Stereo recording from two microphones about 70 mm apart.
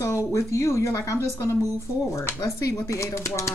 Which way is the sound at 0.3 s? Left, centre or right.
Left.